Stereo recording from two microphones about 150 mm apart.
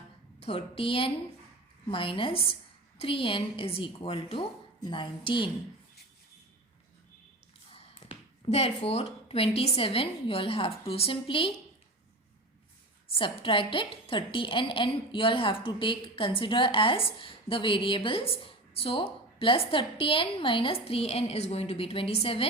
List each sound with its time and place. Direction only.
0.4 s a woman's voice: 40° left (ahead or behind)
7.9 s a woman's voice: 40° left (ahead or behind)
13.1 s a woman's voice: 35° left (ahead or behind)